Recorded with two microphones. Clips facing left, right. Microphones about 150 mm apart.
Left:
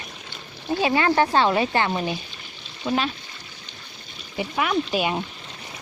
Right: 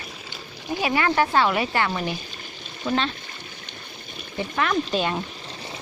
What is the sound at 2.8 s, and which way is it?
Speech, 5° left (ahead or behind).